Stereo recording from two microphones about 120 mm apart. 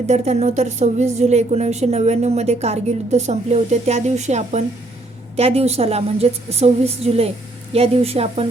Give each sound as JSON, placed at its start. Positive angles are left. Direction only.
{"t": 0.1, "sound": "a woman's voice", "side_deg": -70}
{"t": 5.4, "sound": "a woman's voice", "side_deg": -60}